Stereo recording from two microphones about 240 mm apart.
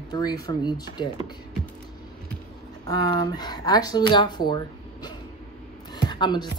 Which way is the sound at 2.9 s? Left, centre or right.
Centre.